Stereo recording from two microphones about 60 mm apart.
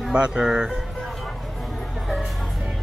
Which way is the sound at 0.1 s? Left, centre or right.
Centre.